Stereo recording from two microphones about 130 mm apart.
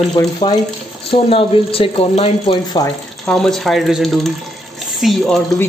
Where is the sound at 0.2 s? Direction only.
25° left (ahead or behind).